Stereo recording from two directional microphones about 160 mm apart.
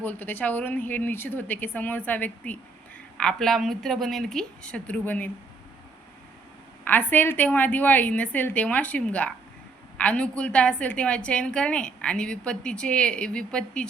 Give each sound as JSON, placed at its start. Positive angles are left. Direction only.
{"t": 0.0, "sound": "a woman's voice", "side_deg": 10}
{"t": 6.8, "sound": "a woman's voice", "side_deg": 10}